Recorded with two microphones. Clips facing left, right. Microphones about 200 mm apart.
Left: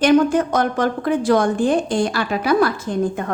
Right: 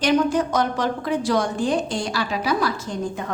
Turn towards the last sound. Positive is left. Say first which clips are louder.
# left 6 dB
turn(degrees=55)  # may be behind; listen again after turning